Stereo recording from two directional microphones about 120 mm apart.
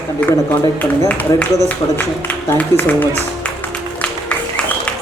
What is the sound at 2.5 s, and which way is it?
Speech, 15° left (ahead or behind).